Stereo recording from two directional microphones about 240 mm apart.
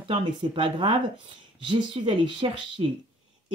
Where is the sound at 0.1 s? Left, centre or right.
Right.